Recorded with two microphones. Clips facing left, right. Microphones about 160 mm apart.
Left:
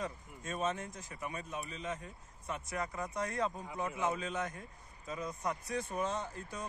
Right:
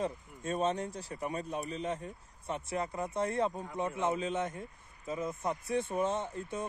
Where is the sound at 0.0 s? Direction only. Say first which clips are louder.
Right 6 dB; 30° right (ahead or behind).